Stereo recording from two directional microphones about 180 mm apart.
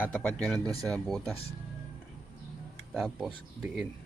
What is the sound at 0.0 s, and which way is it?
Speech, 5° left (ahead or behind).